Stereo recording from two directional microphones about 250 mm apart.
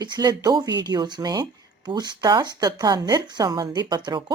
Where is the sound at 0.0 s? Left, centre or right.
Centre.